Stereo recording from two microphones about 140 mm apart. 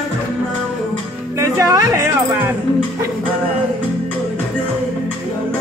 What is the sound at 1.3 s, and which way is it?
Music, 20° right (ahead or behind).